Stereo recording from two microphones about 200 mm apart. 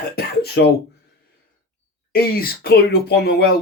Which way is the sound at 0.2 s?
55° left (ahead or behind).